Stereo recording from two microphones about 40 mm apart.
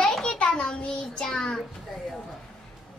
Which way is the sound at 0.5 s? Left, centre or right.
Left.